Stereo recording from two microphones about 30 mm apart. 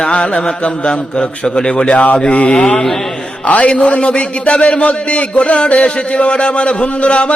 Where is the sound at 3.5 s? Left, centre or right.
Left.